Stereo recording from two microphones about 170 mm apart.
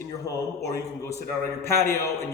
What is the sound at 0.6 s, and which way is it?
A man's voice, 20° left (ahead or behind).